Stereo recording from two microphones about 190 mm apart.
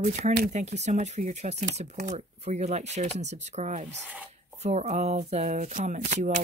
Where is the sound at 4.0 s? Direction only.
10° right (ahead or behind).